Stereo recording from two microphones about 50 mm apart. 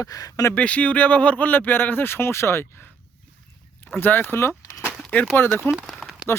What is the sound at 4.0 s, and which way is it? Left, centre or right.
Speech, left.